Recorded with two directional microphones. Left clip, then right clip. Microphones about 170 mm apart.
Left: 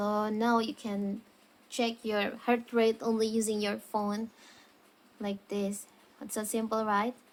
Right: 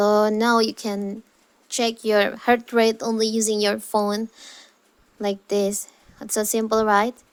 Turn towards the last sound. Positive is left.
turn(degrees=-45)  # may be behind; listen again after turning